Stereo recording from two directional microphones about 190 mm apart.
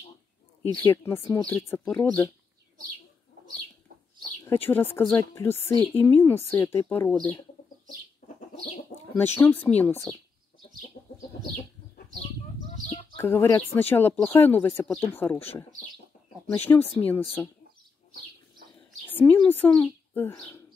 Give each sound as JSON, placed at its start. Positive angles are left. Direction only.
{"t": 0.8, "sound": "speech", "side_deg": 15}
{"t": 4.5, "sound": "speech", "side_deg": 10}
{"t": 9.1, "sound": "speech", "side_deg": 10}
{"t": 12.8, "sound": "bird", "side_deg": 30}
{"t": 13.2, "sound": "speech", "side_deg": 15}
{"t": 19.0, "sound": "a sound", "side_deg": 10}
{"t": 19.5, "sound": "speech", "side_deg": 10}